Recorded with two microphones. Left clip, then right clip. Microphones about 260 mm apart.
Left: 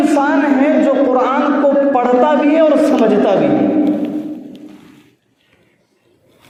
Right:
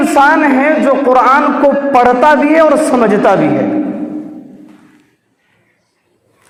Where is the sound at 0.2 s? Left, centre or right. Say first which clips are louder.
Right 5 dB; right.